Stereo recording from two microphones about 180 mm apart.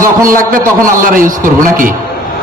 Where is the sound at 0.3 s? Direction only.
50° right (ahead or behind).